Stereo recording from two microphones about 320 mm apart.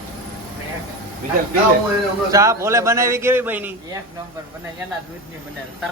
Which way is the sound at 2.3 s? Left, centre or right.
Centre.